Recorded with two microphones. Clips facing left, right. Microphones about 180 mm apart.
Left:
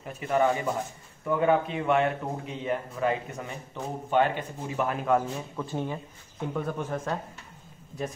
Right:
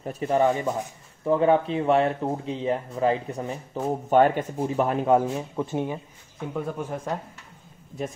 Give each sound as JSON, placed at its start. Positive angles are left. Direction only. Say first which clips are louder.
{"t": 0.0, "sound": "speech", "louder": "right 3 dB", "side_deg": -30}
{"t": 6.5, "sound": "speech", "louder": "right 1 dB", "side_deg": -10}